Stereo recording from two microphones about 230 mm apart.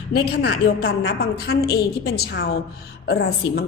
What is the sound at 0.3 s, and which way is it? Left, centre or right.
A woman's voice, left.